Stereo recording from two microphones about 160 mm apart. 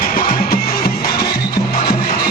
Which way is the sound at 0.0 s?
65° left (ahead or behind).